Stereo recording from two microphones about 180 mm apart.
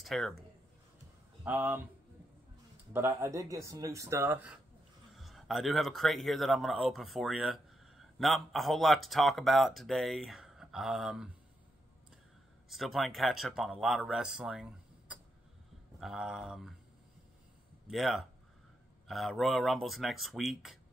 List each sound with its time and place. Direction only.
0.0 s speech: centre (ahead or behind)
1.4 s speech: 10° right (ahead or behind)
2.9 s speech: 15° right (ahead or behind)
12.6 s speech: centre (ahead or behind)
17.8 s speech: centre (ahead or behind)